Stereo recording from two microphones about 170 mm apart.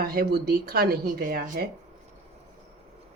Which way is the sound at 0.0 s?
60° right (ahead or behind).